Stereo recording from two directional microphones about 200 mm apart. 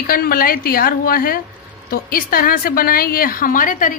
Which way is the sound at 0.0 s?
45° left (ahead or behind).